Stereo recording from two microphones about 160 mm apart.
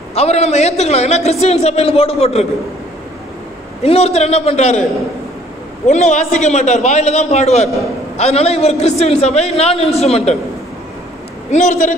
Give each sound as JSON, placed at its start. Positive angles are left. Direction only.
{"t": 0.1, "sound": "a man's voice", "side_deg": 40}
{"t": 3.8, "sound": "a man's voice", "side_deg": 40}
{"t": 5.9, "sound": "a man's voice", "side_deg": 50}
{"t": 11.5, "sound": "a man's voice", "side_deg": 50}